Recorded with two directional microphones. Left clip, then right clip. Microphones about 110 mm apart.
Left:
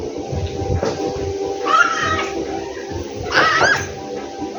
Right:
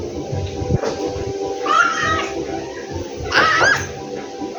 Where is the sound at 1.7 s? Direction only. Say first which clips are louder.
Even; 20° left (ahead or behind).